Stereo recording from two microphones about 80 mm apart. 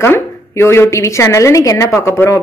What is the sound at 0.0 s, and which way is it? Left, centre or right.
A woman's voice, left.